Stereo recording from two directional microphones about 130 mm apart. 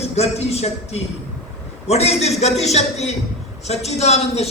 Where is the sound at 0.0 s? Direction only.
55° left (ahead or behind).